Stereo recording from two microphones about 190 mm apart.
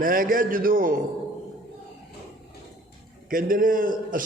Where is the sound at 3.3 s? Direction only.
45° right (ahead or behind).